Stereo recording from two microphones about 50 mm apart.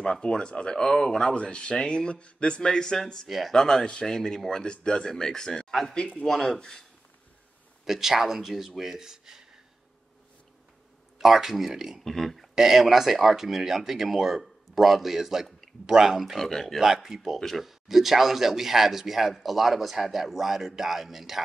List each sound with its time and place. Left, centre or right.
0.0 s speech: centre
3.3 s speech: centre
3.5 s speech: centre
7.8 s speech: centre
11.1 s speech: centre
12.0 s speech: centre
16.4 s speech: centre
16.8 s speech: centre